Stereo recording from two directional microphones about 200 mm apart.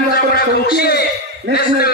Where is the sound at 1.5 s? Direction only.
65° right (ahead or behind).